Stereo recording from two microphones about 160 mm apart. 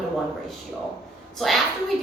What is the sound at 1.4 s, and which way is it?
Speech, centre (ahead or behind).